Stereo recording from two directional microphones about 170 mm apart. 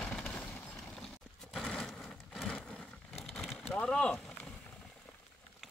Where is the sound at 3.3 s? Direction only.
Centre (ahead or behind).